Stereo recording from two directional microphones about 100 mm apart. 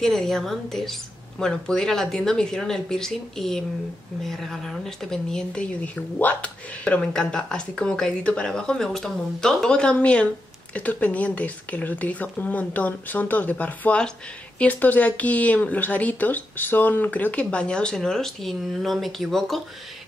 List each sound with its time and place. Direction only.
0.0 s speech: 5° left (ahead or behind)